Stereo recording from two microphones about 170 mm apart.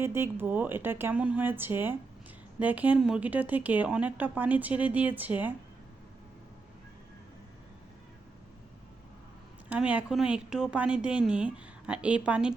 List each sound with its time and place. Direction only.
0.0 s speech: 15° right (ahead or behind)
9.6 s speech: 10° right (ahead or behind)